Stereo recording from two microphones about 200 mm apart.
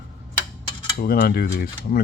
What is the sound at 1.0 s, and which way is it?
Speech, 50° left (ahead or behind).